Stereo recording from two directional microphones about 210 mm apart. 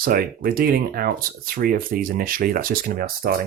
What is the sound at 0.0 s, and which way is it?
Speech, 45° right (ahead or behind).